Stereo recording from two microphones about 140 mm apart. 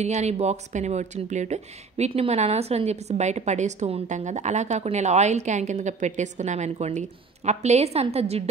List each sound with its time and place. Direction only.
0.0 s speech: 55° right (ahead or behind)